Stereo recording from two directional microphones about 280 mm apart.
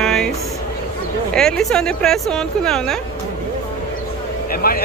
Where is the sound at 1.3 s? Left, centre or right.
Centre.